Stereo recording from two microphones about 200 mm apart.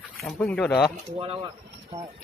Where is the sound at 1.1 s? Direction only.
30° right (ahead or behind).